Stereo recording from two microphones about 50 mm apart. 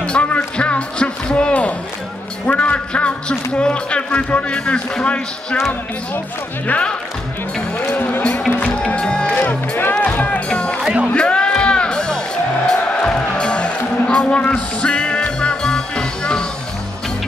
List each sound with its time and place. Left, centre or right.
0.0 s music: left
2.4 s speech: left
7.9 s speech: left
8.7 s music: left
9.4 s music: left
10.0 s music: left
10.5 s music: centre
10.8 s music: centre
11.1 s music: centre